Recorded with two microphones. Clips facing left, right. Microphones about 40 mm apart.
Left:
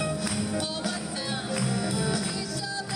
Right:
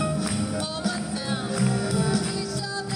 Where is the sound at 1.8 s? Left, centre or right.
Left.